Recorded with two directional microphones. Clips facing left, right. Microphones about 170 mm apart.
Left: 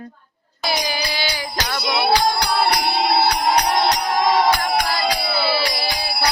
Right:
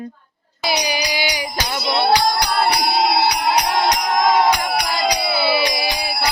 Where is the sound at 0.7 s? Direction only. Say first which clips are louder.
Right 2 dB; 15° right (ahead or behind).